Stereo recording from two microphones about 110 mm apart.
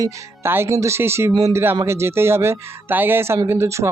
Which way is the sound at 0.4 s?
20° right (ahead or behind).